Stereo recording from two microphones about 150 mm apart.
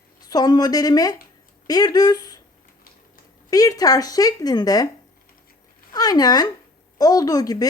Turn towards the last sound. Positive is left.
turn(degrees=25)  # may be behind; listen again after turning